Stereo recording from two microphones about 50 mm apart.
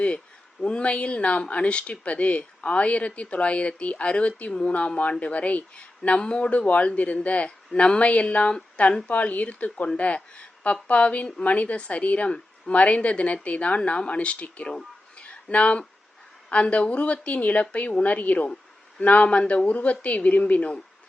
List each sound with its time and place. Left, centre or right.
0.6 s speech: left
15.2 s a sound: left
16.5 s speech: left